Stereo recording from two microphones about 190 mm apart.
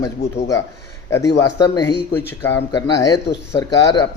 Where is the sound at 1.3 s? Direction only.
20° left (ahead or behind).